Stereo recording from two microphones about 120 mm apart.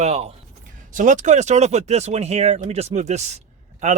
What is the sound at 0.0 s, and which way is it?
Speech, 60° right (ahead or behind).